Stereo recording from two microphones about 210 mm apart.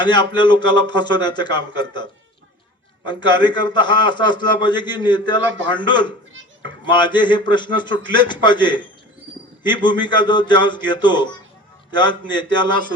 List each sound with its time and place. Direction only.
0.0 s a man's voice: 20° left (ahead or behind)
3.1 s a man's voice: 20° left (ahead or behind)